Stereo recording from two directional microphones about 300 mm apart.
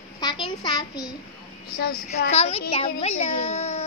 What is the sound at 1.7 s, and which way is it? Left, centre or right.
Speech, left.